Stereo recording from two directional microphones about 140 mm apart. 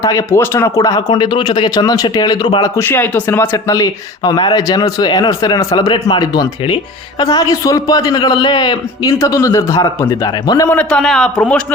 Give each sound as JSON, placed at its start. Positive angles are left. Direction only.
{"t": 0.0, "sound": "speech", "side_deg": 25}
{"t": 2.7, "sound": "speech", "side_deg": 15}
{"t": 10.7, "sound": "a man's voice", "side_deg": 10}